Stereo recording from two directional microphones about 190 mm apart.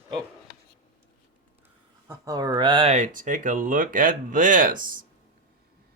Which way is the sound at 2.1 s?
20° right (ahead or behind).